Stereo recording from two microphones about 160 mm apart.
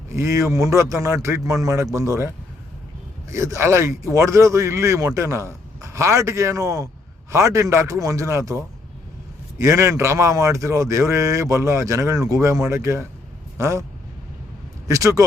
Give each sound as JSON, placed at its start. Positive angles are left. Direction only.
{"t": 0.1, "sound": "speech", "side_deg": -20}
{"t": 14.8, "sound": "speech", "side_deg": -20}